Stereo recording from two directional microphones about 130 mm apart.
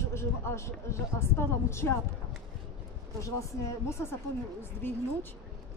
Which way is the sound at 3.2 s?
25° left (ahead or behind).